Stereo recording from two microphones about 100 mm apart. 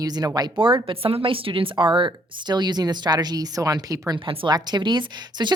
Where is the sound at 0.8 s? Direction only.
70° right (ahead or behind); by 4.2 s 35° right (ahead or behind).